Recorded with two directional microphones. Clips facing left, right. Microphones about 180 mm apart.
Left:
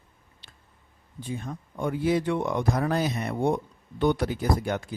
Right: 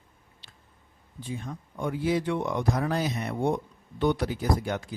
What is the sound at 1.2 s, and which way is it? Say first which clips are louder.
Speech: left 2 dB; 50° left (ahead or behind).